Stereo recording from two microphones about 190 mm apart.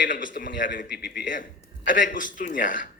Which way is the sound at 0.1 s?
45° left (ahead or behind).